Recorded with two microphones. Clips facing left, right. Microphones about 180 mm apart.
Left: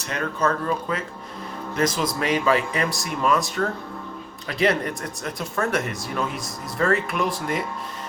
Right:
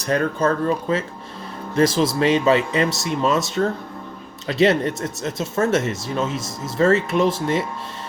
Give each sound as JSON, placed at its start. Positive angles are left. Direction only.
{"t": 0.0, "sound": "speech", "side_deg": -40}